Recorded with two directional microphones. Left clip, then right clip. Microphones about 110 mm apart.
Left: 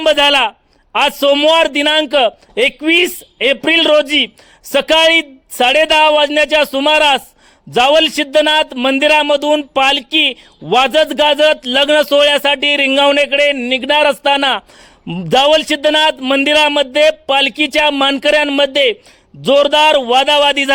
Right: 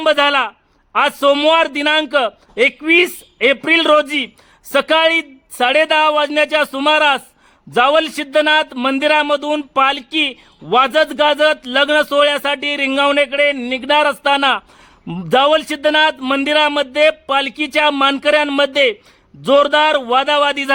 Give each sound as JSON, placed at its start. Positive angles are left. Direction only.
{"t": 0.0, "sound": "a man's voice", "side_deg": 20}